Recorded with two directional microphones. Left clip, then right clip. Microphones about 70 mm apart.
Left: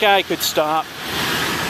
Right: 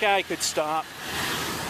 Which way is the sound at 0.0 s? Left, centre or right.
Centre.